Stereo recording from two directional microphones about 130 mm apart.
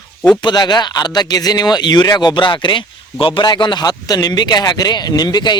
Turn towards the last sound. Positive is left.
turn(degrees=35)  # may be behind; listen again after turning